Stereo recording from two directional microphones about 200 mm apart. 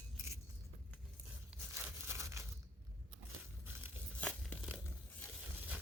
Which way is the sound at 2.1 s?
15° right (ahead or behind).